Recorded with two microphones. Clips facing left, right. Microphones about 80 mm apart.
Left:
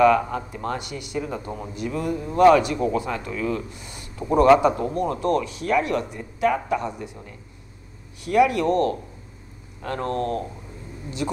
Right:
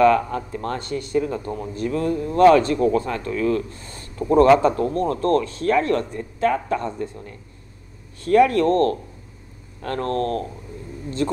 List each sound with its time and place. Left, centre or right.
0.0 s a man's voice: centre
8.3 s a man's voice: centre
9.8 s speech: left